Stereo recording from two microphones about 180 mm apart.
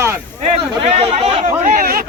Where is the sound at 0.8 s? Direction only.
35° right (ahead or behind).